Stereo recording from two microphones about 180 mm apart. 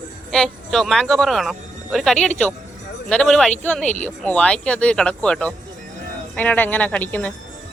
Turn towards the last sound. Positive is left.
turn(degrees=10)  # may be behind; listen again after turning